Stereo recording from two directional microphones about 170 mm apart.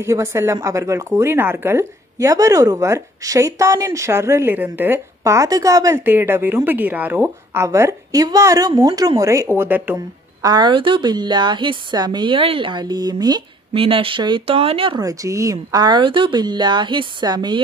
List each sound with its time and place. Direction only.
0.0 s speech: 15° right (ahead or behind)
9.9 s speech: 25° right (ahead or behind)
15.0 s speech: 20° right (ahead or behind)